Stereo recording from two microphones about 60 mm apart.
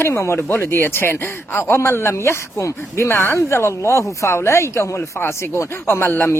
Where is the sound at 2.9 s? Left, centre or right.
Left.